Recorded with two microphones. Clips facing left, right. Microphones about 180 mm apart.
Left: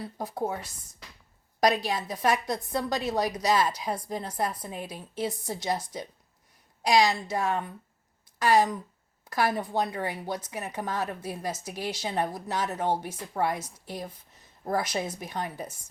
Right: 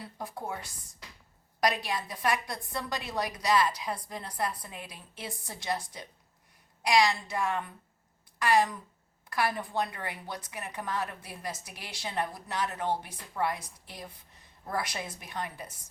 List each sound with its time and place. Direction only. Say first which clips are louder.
0.2 s a woman's voice: left 6 dB; 40° left (ahead or behind)
1.6 s a woman's voice: left 5 dB; 40° left (ahead or behind)